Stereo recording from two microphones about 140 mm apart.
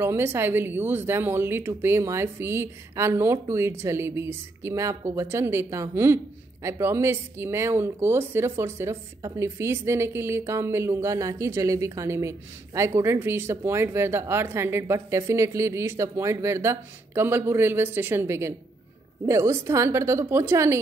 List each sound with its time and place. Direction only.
0.0 s speech: 15° right (ahead or behind)